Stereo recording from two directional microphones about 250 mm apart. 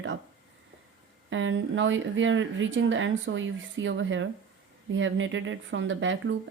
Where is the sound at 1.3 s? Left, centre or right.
Right.